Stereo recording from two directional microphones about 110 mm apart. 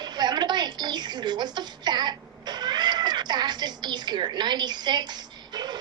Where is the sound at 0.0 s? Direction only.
40° right (ahead or behind).